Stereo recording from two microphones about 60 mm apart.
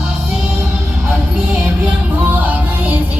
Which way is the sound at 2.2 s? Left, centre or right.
Right.